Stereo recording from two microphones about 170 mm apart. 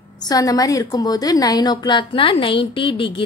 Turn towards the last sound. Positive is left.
turn(degrees=30)  # may be behind; listen again after turning